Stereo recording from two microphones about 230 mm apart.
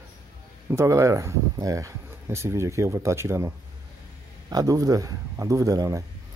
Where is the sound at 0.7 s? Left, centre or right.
Centre.